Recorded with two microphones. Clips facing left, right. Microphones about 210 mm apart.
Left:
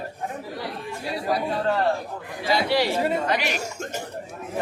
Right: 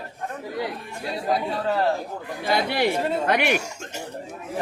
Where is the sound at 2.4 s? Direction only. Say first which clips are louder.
Even; 55° right (ahead or behind).